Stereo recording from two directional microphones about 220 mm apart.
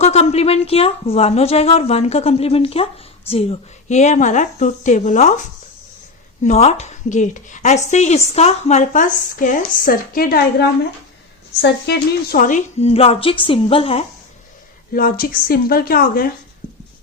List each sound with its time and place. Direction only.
0.0 s a woman's voice: 30° left (ahead or behind)
14.9 s a woman's voice: 40° left (ahead or behind)